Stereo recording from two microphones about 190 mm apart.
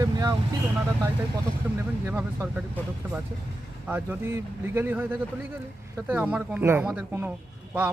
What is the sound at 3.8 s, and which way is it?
A man's voice, 10° right (ahead or behind).